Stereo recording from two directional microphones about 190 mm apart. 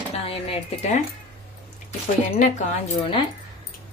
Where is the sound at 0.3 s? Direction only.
35° left (ahead or behind).